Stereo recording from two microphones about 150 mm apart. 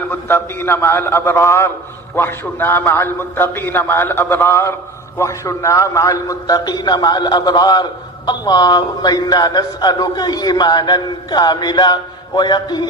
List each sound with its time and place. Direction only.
0.1 s a man's voice: 15° left (ahead or behind)